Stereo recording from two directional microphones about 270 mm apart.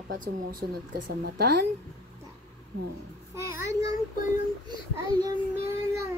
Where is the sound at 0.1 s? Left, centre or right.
Right.